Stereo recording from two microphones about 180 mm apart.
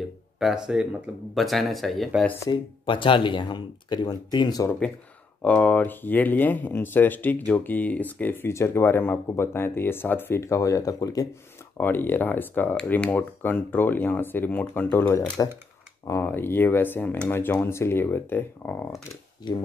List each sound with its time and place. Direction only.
0.4 s speech: 5° right (ahead or behind)
2.4 s speech: 25° left (ahead or behind)
5.4 s speech: 10° left (ahead or behind)